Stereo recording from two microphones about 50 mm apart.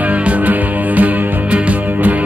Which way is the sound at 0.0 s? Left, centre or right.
Right.